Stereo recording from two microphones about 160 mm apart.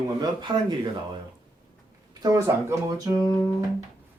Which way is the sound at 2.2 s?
20° right (ahead or behind).